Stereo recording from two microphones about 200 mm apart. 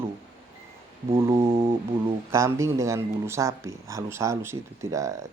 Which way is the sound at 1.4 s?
30° right (ahead or behind).